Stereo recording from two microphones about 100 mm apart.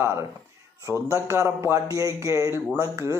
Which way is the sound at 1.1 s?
30° right (ahead or behind).